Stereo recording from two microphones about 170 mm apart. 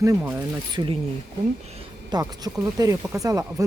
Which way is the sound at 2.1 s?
20° right (ahead or behind).